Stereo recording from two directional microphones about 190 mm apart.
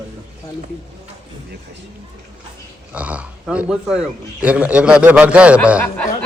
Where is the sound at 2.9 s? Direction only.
5° right (ahead or behind).